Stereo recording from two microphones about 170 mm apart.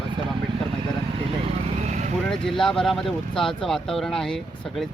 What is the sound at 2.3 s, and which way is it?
Speech, centre (ahead or behind).